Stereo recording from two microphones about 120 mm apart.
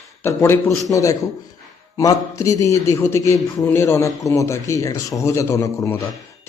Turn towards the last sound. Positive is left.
turn(degrees=20)  # may be behind; listen again after turning